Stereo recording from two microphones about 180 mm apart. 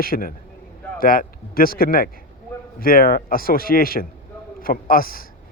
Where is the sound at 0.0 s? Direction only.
55° left (ahead or behind).